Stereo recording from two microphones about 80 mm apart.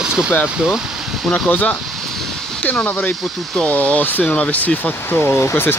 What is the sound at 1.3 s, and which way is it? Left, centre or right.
Speech, centre.